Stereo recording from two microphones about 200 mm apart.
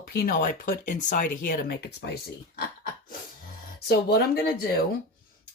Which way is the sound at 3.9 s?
55° left (ahead or behind).